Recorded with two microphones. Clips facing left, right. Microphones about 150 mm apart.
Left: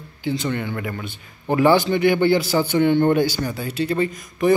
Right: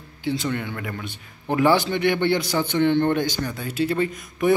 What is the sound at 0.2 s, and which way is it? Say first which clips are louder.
A man's voice: left 2 dB; centre (ahead or behind).